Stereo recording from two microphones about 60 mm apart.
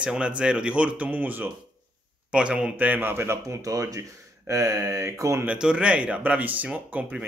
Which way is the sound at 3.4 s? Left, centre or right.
Right.